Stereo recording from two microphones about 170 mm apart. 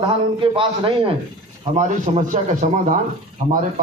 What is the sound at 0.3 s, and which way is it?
Speech, 30° right (ahead or behind).